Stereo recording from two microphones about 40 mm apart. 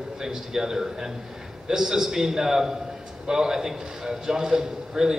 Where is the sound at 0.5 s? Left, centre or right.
Centre.